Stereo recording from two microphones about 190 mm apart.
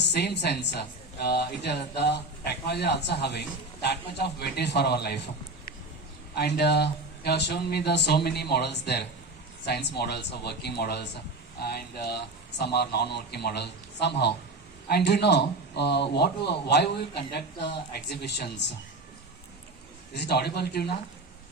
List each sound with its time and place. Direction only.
0.0 s speech: 60° left (ahead or behind)
20.1 s speech: 60° left (ahead or behind)